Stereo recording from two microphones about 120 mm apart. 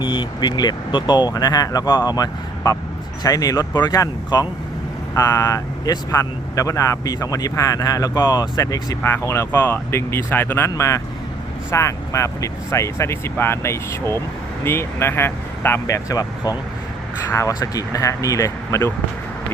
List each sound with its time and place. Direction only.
0.0 s speech: 45° left (ahead or behind); by 18.9 s 25° left (ahead or behind)